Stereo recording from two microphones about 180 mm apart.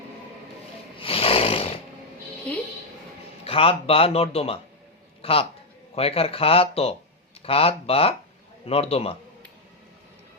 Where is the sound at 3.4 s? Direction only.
30° left (ahead or behind).